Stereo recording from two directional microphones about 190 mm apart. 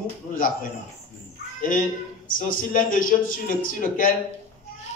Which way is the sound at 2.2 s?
45° left (ahead or behind).